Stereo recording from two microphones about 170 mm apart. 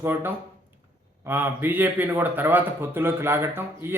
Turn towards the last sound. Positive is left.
turn(degrees=-15)  # may be behind; listen again after turning